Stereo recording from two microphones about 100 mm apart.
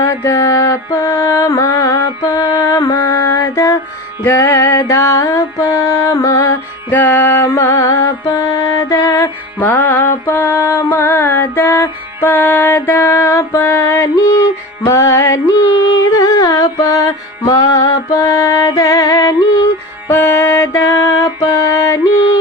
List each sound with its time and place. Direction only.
0.0 s music: 30° left (ahead or behind)
2.9 s mantra: 35° left (ahead or behind)
6.9 s mantra: 20° left (ahead or behind)
8.9 s music: 30° left (ahead or behind)
9.6 s music: 15° left (ahead or behind)